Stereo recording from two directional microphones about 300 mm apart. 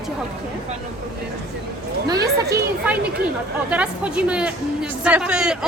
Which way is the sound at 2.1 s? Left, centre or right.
Centre.